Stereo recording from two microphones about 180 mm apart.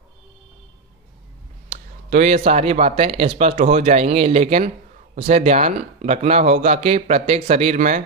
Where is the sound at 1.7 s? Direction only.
40° right (ahead or behind).